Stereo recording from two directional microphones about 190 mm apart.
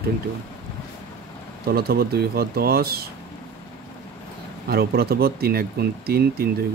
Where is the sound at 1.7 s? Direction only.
55° right (ahead or behind).